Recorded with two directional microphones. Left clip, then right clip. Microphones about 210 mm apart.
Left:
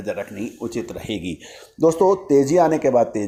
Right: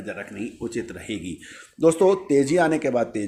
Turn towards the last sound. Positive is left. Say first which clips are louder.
# left 6 dB
turn(degrees=10)  # may be behind; listen again after turning